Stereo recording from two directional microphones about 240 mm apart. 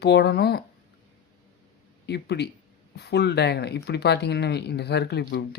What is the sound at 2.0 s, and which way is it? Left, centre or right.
Speech, left.